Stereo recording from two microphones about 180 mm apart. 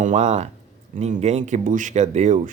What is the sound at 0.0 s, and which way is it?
Speech, 40° right (ahead or behind).